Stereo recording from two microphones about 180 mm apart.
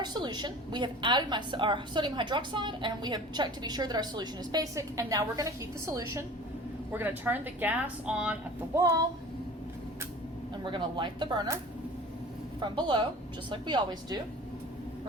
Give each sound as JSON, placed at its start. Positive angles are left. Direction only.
{"t": 0.0, "sound": "a woman's voice", "side_deg": -25}
{"t": 10.6, "sound": "a woman's voice", "side_deg": -25}